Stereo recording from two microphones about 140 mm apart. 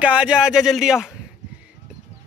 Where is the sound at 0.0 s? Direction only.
10° right (ahead or behind).